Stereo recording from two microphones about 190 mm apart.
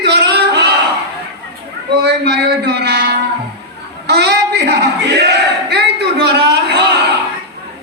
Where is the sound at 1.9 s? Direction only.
60° right (ahead or behind).